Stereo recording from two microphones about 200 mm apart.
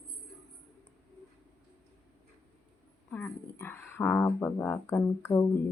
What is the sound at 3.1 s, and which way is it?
Speech, 10° left (ahead or behind).